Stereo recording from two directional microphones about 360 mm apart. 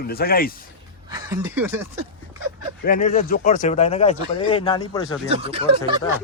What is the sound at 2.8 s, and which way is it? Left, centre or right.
Speech, left.